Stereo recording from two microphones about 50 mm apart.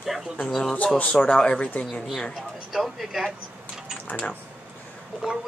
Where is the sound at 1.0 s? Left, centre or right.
Centre.